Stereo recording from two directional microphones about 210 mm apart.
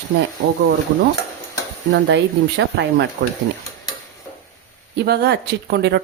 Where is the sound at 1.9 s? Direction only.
55° right (ahead or behind).